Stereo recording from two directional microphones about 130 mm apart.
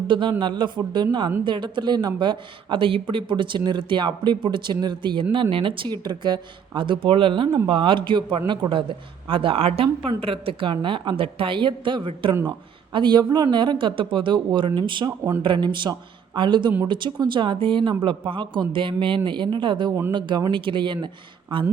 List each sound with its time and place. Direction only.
0.1 s a man's voice: 40° right (ahead or behind)